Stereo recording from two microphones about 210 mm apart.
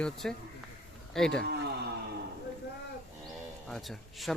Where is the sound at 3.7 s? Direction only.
Centre (ahead or behind).